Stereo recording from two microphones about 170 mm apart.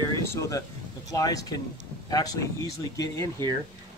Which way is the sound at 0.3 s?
20° left (ahead or behind).